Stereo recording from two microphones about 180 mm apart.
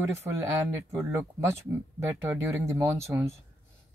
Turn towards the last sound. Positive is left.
turn(degrees=-15)  # may be behind; listen again after turning